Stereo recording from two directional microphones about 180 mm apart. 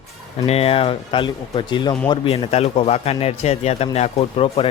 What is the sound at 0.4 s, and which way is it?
Speech, 35° left (ahead or behind).